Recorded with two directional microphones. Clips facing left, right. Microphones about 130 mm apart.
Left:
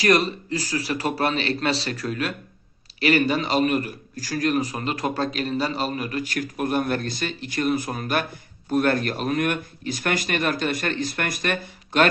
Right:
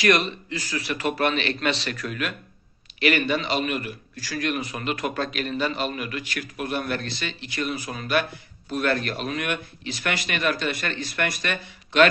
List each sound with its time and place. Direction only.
0.0 s a man's voice: 35° left (ahead or behind)